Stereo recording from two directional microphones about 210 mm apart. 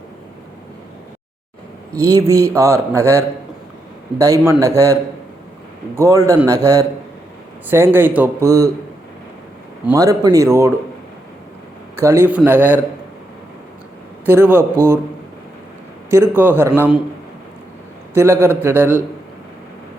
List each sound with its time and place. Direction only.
2.0 s speech: 15° right (ahead or behind)
2.9 s a man's voice: 10° left (ahead or behind)
4.2 s speech: 15° right (ahead or behind)
6.0 s speech: 15° right (ahead or behind)
7.7 s speech: 10° right (ahead or behind)
9.8 s speech: 15° right (ahead or behind)
11.9 s speech: 10° right (ahead or behind)
14.3 s speech: 10° right (ahead or behind)
16.0 s speech: 10° right (ahead or behind)
18.1 s speech: 10° right (ahead or behind)